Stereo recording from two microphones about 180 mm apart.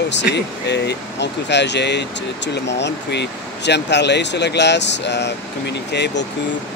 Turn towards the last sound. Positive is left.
turn(degrees=70)  # may be behind; listen again after turning